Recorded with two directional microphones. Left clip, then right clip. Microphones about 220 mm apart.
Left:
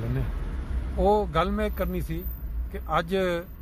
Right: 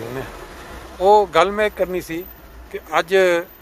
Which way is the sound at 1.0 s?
15° right (ahead or behind).